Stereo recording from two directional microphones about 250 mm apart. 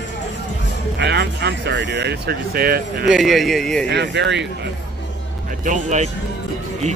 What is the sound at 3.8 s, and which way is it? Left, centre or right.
Speech, right.